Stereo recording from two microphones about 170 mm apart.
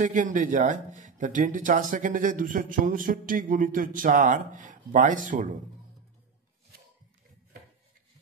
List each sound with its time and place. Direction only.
0.0 s a man's voice: 50° right (ahead or behind)